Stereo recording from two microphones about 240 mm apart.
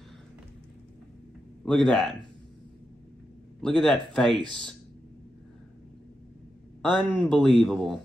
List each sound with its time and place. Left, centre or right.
1.6 s a man's voice: centre
3.6 s a man's voice: centre
6.9 s a man's voice: centre